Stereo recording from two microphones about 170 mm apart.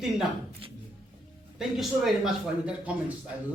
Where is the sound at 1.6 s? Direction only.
Centre (ahead or behind).